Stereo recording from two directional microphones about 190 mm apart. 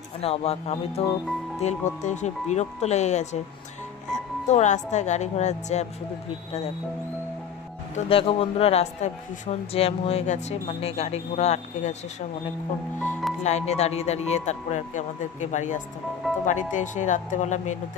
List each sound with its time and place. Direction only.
0.2 s a woman's voice: 30° left (ahead or behind)
7.9 s speech: 30° left (ahead or behind)
13.4 s speech: 35° left (ahead or behind)